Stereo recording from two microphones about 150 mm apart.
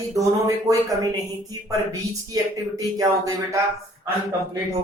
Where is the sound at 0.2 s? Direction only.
20° right (ahead or behind).